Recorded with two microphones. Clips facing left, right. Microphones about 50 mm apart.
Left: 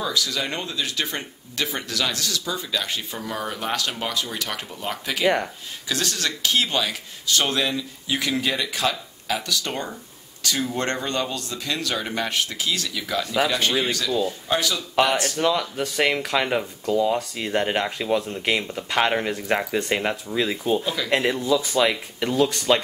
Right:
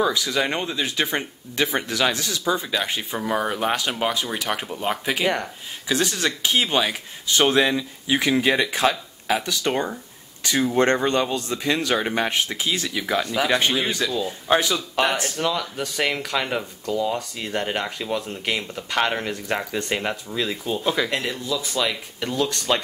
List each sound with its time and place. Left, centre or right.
0.0 s speech: right
15.3 s speech: centre
20.8 s speech: right
21.1 s speech: left